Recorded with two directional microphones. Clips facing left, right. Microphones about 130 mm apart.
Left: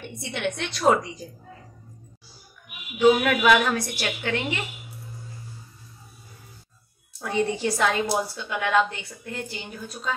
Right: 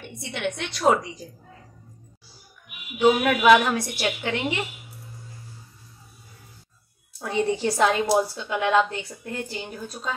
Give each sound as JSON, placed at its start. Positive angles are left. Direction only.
{"t": 0.0, "sound": "a woman's voice", "side_deg": -5}
{"t": 3.0, "sound": "a woman's voice", "side_deg": -20}
{"t": 7.2, "sound": "a woman's voice", "side_deg": -25}